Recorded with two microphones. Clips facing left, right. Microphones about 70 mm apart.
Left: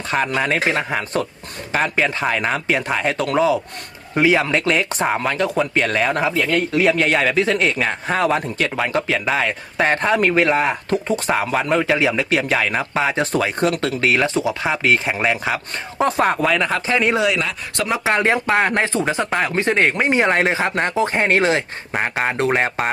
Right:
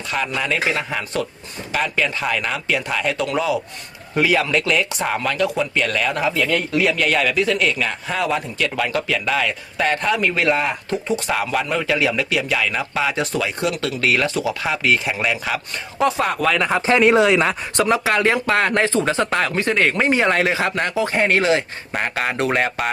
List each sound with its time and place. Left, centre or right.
0.1 s a man's voice: left
12.3 s a man's voice: left
13.3 s a man's voice: left
14.0 s speech: left
16.0 s a man's voice: left
16.4 s speech: centre
17.2 s speech: right
17.9 s speech: left
19.5 s a man's voice: left
22.0 s speech: centre